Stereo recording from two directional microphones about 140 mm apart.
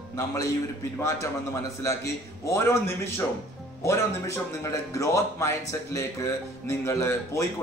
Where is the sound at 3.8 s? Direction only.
20° left (ahead or behind).